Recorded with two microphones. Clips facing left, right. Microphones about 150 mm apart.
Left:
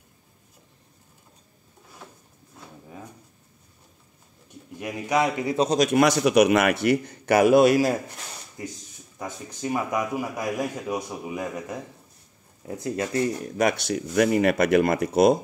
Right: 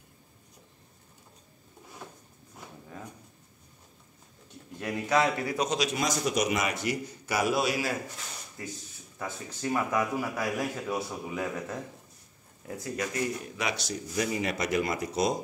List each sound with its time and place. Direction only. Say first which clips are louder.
4.7 s speech: left 2 dB; 15° left (ahead or behind)
5.7 s a man's voice: left 10 dB; 50° left (ahead or behind)
9.2 s speech: left 2 dB; 15° left (ahead or behind)
12.6 s speech: left 5 dB; 25° left (ahead or behind)
13.6 s a man's voice: left 13 dB; 55° left (ahead or behind)